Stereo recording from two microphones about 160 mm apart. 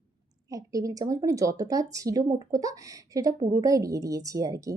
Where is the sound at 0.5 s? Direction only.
20° right (ahead or behind).